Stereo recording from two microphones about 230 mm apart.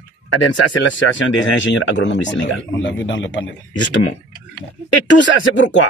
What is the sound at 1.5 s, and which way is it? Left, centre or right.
Speech, left.